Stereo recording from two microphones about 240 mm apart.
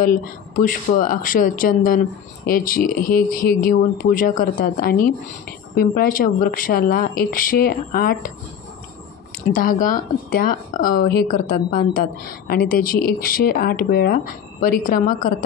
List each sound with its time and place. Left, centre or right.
0.0 s speech: left
9.5 s speech: left